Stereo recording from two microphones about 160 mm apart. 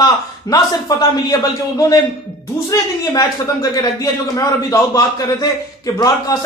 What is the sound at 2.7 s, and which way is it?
A man's voice, 20° left (ahead or behind).